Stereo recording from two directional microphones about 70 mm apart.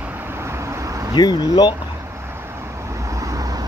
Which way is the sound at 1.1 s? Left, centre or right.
Left.